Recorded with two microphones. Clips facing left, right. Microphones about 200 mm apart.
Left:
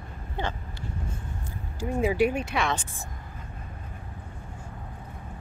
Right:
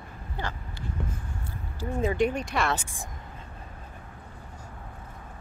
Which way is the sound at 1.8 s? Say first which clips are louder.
Left 2 dB; 10° left (ahead or behind).